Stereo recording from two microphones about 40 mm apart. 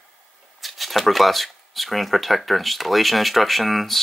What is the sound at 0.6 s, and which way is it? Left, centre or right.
Speech, centre.